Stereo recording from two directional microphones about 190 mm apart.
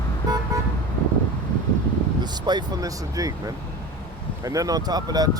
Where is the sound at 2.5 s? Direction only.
20° right (ahead or behind).